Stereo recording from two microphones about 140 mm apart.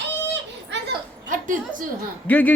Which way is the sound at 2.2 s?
10° left (ahead or behind).